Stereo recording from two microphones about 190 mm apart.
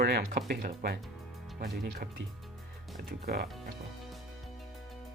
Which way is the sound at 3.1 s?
55° right (ahead or behind).